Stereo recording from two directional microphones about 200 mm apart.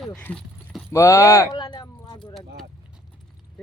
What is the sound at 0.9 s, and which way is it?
Speech, 15° left (ahead or behind).